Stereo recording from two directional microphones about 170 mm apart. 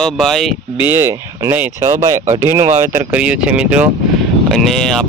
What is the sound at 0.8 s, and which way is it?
Speech, 15° right (ahead or behind).